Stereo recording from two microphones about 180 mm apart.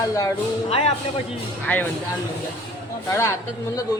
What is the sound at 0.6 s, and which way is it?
Speech, 35° left (ahead or behind).